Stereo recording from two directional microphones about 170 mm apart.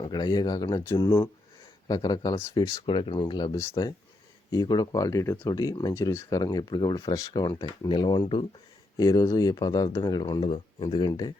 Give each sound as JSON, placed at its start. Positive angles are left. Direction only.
{"t": 0.0, "sound": "speech", "side_deg": 25}